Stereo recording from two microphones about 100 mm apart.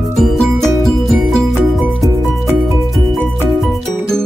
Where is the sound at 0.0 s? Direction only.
Centre (ahead or behind).